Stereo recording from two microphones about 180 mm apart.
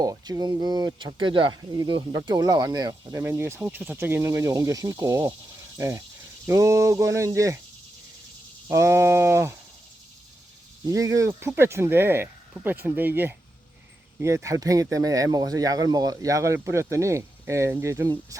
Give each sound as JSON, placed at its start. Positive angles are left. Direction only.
{"t": 0.0, "sound": "speech", "side_deg": -20}
{"t": 8.7, "sound": "speech", "side_deg": -15}
{"t": 10.8, "sound": "speech", "side_deg": -20}